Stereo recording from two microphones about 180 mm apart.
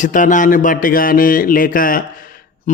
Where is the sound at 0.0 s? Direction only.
45° left (ahead or behind).